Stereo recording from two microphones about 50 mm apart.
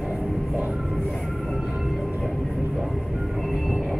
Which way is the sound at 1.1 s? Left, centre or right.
Centre.